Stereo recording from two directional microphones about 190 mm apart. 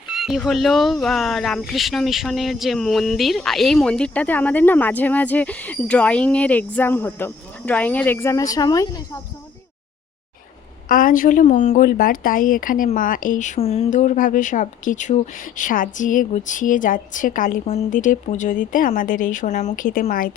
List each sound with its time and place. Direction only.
0.1 s speech: centre (ahead or behind); by 9.2 s 15° left (ahead or behind)
10.8 s speech: 45° left (ahead or behind)